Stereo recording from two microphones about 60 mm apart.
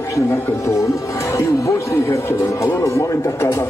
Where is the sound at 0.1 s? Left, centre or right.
Left.